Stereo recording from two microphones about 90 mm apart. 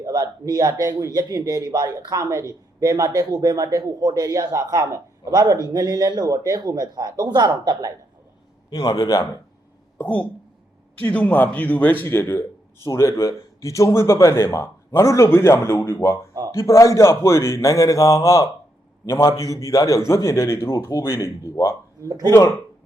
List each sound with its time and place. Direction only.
0.0 s a man's voice: 45° right (ahead or behind)
2.2 s a man's voice: 35° right (ahead or behind)
8.7 s a man's voice: 40° left (ahead or behind)
10.0 s a man's voice: 20° left (ahead or behind); by 21.8 s 35° left (ahead or behind)
22.0 s speech: 35° right (ahead or behind)
22.3 s speech: 30° left (ahead or behind)